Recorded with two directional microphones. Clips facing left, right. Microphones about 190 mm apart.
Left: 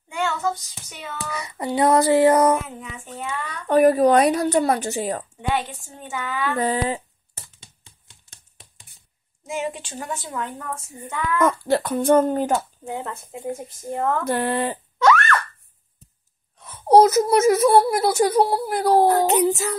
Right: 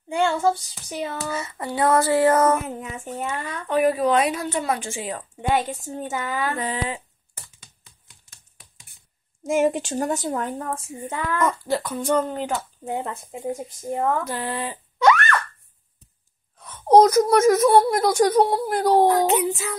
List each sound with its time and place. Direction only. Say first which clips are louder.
0.1 s child singing: right 4 dB; 30° right (ahead or behind)
1.3 s speech: left 2 dB; 15° left (ahead or behind)
2.8 s a woman's voice: right 4 dB; 45° right (ahead or behind)
3.6 s a woman's voice: left 5 dB; 45° left (ahead or behind)
5.5 s child singing: right 2 dB; 45° right (ahead or behind)
6.5 s a woman's voice: left 5 dB; 40° left (ahead or behind)
7.6 s a sound: left 2 dB; 25° left (ahead or behind)
9.4 s a woman's voice: right 8 dB; 45° right (ahead or behind)
11.4 s speech: left 5 dB; 60° left (ahead or behind); by 12.6 s 45° left (ahead or behind)
12.9 s speech: right 2 dB; 15° right (ahead or behind)
14.2 s speech: left 6 dB; 60° left (ahead or behind)
15.0 s a sound: even; 15° right (ahead or behind)
16.5 s speech: even; 5° left (ahead or behind)
19.0 s a woman's voice: left 1 dB; 40° left (ahead or behind)